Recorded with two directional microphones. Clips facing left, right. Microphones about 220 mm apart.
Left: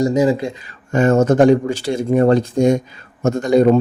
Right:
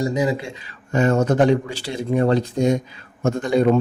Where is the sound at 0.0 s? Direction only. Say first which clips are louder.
Left 6 dB; 45° left (ahead or behind).